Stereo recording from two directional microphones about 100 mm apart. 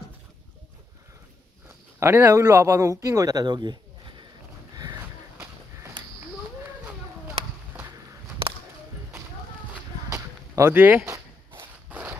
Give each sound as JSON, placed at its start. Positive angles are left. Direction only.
{"t": 2.0, "sound": "speech", "side_deg": -25}
{"t": 4.7, "sound": "a sound", "side_deg": -40}
{"t": 10.1, "sound": "whip", "side_deg": -30}
{"t": 10.7, "sound": "speech", "side_deg": -20}
{"t": 11.1, "sound": "walk", "side_deg": -20}